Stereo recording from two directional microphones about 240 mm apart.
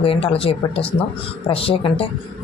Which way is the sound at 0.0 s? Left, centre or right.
Left.